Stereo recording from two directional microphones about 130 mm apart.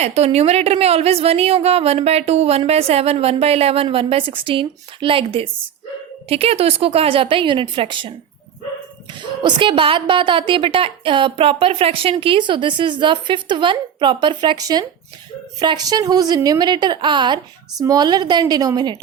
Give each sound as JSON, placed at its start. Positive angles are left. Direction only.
{"t": 0.0, "sound": "a woman's voice", "side_deg": -55}
{"t": 9.4, "sound": "a woman's voice", "side_deg": -40}